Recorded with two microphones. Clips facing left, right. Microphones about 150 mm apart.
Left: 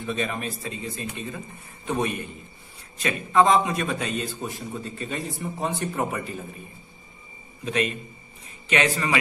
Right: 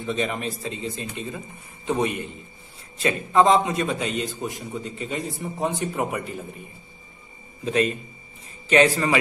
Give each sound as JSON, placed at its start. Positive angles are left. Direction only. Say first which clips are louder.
{"t": 0.0, "sound": "a man's voice", "louder": "right 2 dB", "side_deg": -20}
{"t": 7.6, "sound": "a man's voice", "louder": "right 4 dB", "side_deg": -30}